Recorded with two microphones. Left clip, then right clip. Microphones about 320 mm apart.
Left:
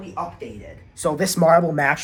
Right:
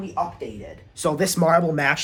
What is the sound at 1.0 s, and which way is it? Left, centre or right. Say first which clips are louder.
Speech: left 2 dB; centre.